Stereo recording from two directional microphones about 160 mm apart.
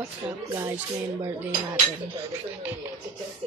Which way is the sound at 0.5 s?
20° right (ahead or behind).